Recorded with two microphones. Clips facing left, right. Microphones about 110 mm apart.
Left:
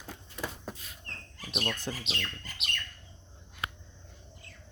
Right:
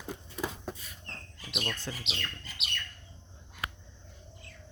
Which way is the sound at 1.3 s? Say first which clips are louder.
Left 3 dB; 40° left (ahead or behind).